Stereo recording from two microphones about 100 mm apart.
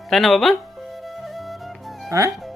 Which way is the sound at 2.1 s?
30° right (ahead or behind).